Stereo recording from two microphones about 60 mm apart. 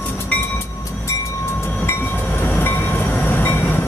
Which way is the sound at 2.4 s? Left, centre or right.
Left.